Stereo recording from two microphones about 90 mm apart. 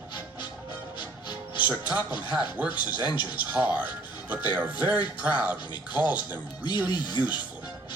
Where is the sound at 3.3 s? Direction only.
20° right (ahead or behind).